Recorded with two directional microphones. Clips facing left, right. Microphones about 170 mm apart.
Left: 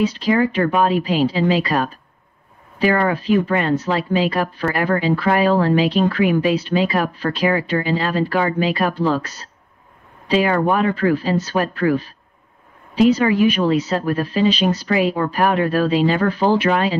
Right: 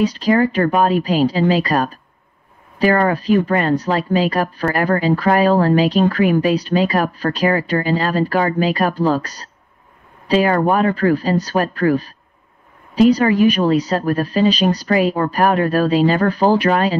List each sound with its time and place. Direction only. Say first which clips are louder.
0.0 s speech: right 2 dB; 45° right (ahead or behind)